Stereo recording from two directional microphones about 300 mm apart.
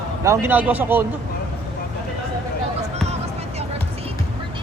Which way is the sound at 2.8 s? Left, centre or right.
Right.